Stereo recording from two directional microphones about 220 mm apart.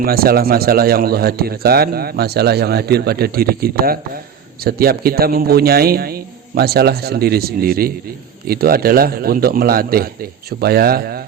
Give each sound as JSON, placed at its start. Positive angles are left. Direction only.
{"t": 0.0, "sound": "a man's voice", "side_deg": -45}